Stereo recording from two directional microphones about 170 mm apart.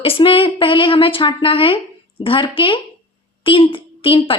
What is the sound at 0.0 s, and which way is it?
Speech, 30° left (ahead or behind).